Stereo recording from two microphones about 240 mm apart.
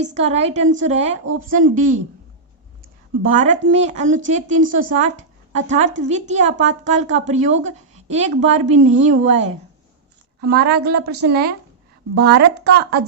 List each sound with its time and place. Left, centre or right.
0.0 s a woman's voice: right
3.2 s a woman's voice: right
10.4 s a woman's voice: right